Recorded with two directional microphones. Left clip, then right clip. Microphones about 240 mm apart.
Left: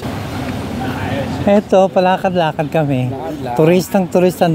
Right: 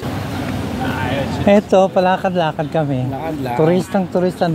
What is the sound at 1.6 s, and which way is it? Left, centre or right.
Speech, centre.